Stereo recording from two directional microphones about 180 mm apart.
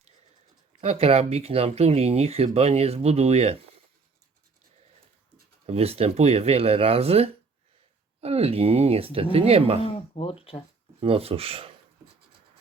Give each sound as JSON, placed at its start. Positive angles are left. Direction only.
{"t": 0.8, "sound": "speech", "side_deg": -35}
{"t": 5.6, "sound": "speech", "side_deg": -35}
{"t": 9.8, "sound": "speech", "side_deg": 30}
{"t": 11.0, "sound": "speech", "side_deg": -30}